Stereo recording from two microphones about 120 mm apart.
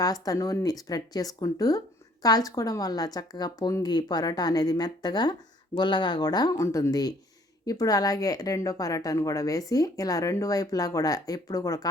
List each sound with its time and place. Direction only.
0.0 s speech: 30° left (ahead or behind)